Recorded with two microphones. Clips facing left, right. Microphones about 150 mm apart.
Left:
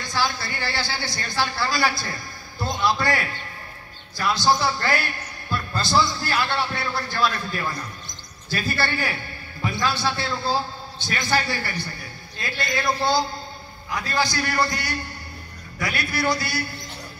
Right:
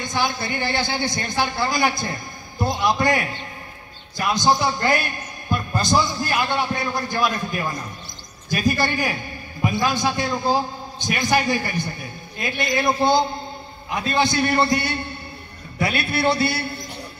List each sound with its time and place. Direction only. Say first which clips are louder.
0.0 s a man's voice: right 2 dB; 20° right (ahead or behind)